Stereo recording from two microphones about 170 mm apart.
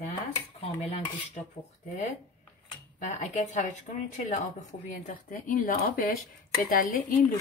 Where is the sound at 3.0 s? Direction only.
45° left (ahead or behind).